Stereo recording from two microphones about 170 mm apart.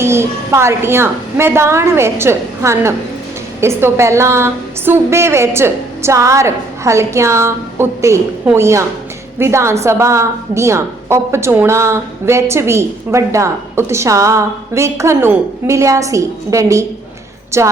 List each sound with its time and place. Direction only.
0.0 s a woman's voice: 15° right (ahead or behind)